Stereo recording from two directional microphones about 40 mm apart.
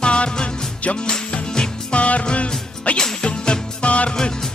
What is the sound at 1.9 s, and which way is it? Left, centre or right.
Music, left.